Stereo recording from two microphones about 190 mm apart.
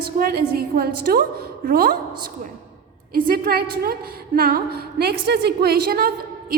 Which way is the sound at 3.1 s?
50° right (ahead or behind).